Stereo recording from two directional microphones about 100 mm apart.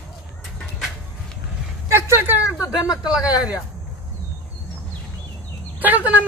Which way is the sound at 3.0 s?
10° right (ahead or behind).